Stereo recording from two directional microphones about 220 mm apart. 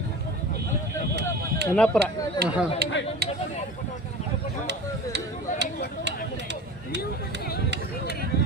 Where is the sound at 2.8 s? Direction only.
45° right (ahead or behind).